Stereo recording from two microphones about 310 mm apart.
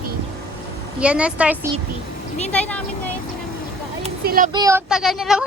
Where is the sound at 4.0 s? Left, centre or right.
Right.